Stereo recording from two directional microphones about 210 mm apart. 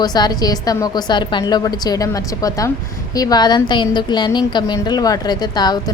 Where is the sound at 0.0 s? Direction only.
20° left (ahead or behind).